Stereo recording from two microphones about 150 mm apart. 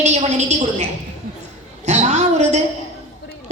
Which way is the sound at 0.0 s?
50° right (ahead or behind).